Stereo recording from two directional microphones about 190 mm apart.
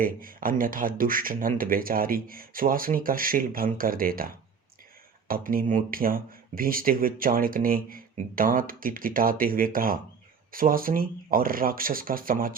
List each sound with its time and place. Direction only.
0.0 s speech: 45° right (ahead or behind)
5.3 s speech: 50° right (ahead or behind)